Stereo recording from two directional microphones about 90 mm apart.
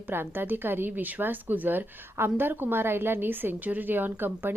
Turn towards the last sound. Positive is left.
turn(degrees=-25)  # may be behind; listen again after turning